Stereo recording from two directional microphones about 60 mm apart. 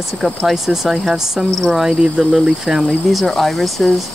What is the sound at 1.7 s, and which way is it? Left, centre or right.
Speech, centre.